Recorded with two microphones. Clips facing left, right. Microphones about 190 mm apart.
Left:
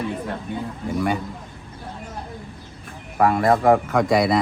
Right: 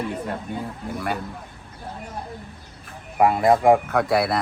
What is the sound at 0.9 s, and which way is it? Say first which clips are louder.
Speech: left 6 dB; centre (ahead or behind).